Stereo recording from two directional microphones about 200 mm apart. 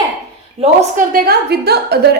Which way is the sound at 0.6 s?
35° right (ahead or behind).